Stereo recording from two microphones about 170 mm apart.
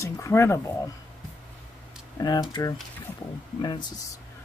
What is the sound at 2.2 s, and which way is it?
Speech, 25° left (ahead or behind).